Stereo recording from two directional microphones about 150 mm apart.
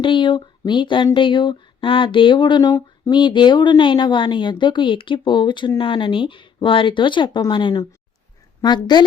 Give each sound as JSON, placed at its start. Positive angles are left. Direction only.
{"t": 0.0, "sound": "speech", "side_deg": 35}